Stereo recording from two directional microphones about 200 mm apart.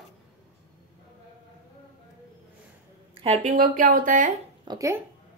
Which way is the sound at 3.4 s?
40° right (ahead or behind).